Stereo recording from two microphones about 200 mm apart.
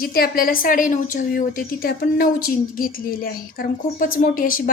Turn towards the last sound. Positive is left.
turn(degrees=45)  # may be behind; listen again after turning